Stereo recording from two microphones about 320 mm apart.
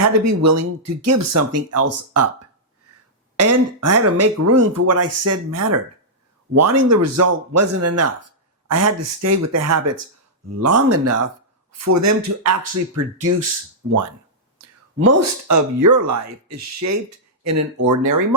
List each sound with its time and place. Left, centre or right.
0.0 s speech: right
3.3 s speech: right
14.9 s speech: right